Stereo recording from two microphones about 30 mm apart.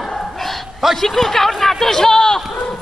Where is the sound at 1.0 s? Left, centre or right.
Centre.